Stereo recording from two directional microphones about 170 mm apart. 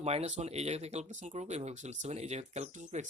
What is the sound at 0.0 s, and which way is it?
Speech, 40° right (ahead or behind).